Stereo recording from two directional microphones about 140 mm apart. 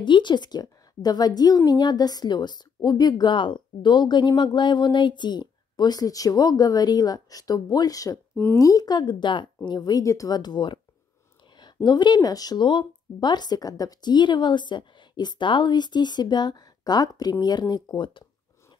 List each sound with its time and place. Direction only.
0.0 s speech: 35° left (ahead or behind)